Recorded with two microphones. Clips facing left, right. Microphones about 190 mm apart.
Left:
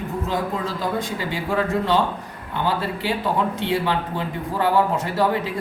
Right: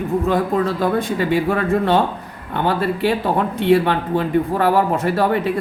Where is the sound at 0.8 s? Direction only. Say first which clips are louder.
Right 7 dB; 60° right (ahead or behind).